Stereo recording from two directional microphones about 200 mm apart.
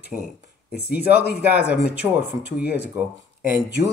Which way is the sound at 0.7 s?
50° left (ahead or behind).